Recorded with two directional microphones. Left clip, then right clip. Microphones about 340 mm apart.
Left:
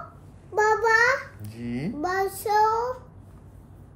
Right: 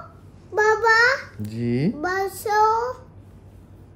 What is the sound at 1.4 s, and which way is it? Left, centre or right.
Speech, right.